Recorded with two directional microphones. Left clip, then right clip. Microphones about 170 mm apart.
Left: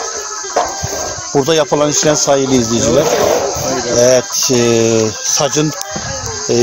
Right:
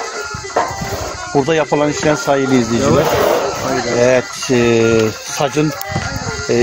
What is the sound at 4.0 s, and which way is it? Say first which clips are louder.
Speech: left 4 dB; 15° left (ahead or behind).